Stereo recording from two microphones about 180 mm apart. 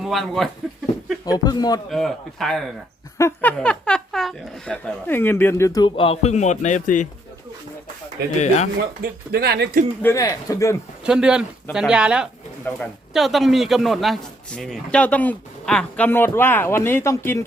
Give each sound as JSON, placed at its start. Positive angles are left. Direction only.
{"t": 0.0, "sound": "speech", "side_deg": 0}
{"t": 1.2, "sound": "speech", "side_deg": 20}
{"t": 1.9, "sound": "speech", "side_deg": 0}
{"t": 3.2, "sound": "a man's voice", "side_deg": 10}
{"t": 8.4, "sound": "speech", "side_deg": 40}
{"t": 9.0, "sound": "speech", "side_deg": -60}
{"t": 10.0, "sound": "a man's voice", "side_deg": 15}
{"t": 11.0, "sound": "a man's voice", "side_deg": -5}